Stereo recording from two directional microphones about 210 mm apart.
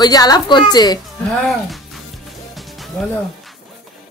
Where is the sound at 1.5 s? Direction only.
Centre (ahead or behind).